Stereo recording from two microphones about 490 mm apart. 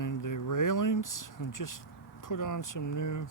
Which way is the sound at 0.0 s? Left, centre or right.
Left.